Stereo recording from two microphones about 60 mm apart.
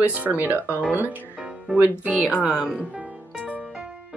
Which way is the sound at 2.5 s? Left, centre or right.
Centre.